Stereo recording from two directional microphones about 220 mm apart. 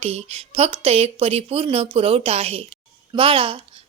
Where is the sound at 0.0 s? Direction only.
25° right (ahead or behind).